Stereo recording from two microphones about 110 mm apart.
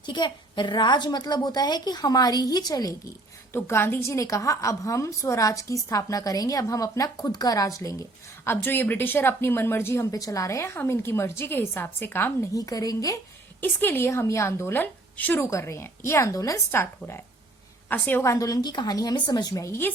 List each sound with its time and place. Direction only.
0.0 s a woman's voice: 45° left (ahead or behind)
3.5 s a woman's voice: 20° left (ahead or behind)
8.4 s speech: 20° left (ahead or behind)
13.6 s a woman's voice: 20° left (ahead or behind)